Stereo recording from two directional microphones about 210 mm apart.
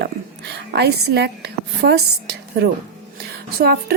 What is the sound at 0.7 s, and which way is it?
A woman's voice, 50° right (ahead or behind).